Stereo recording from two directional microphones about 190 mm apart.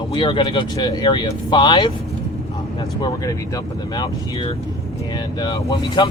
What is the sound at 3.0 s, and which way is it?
Speech, 20° left (ahead or behind).